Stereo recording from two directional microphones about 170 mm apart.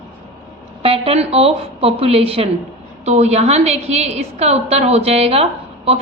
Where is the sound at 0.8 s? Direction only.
35° right (ahead or behind).